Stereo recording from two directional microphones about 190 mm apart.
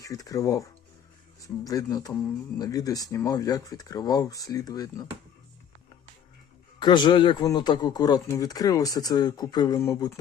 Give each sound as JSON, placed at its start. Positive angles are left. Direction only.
{"t": 0.0, "sound": "speech", "side_deg": 20}
{"t": 6.7, "sound": "speech", "side_deg": 25}